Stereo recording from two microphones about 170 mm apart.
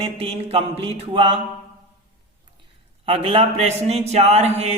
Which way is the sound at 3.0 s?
35° right (ahead or behind).